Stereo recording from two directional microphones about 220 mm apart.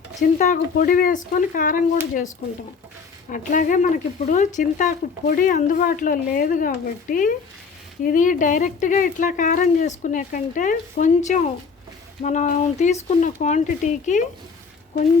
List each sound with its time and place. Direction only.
0.2 s speech: 35° left (ahead or behind)
3.2 s speech: 35° left (ahead or behind)